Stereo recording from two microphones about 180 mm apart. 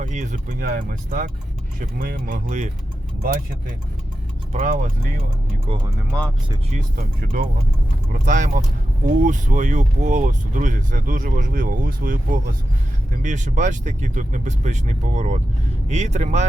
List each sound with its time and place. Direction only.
0.0 s speech: 45° right (ahead or behind)
4.5 s speech: 50° right (ahead or behind)
6.1 s speech: 5° left (ahead or behind)
6.7 s speech: 50° right (ahead or behind)